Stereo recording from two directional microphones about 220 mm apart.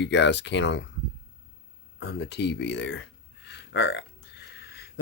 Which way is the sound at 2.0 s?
50° left (ahead or behind).